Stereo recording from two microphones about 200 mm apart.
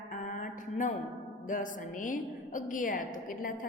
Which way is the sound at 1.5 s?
40° left (ahead or behind).